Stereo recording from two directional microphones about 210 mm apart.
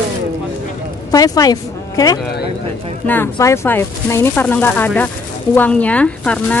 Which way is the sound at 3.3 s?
15° left (ahead or behind).